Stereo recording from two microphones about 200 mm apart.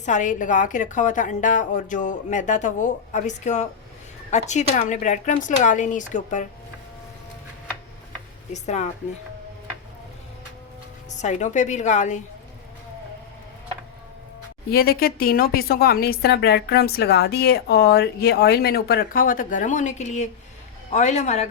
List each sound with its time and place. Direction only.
0.0 s a woman's voice: 40° left (ahead or behind)
8.5 s a woman's voice: 35° left (ahead or behind)
11.2 s a woman's voice: 35° left (ahead or behind)
14.7 s a woman's voice: 50° left (ahead or behind)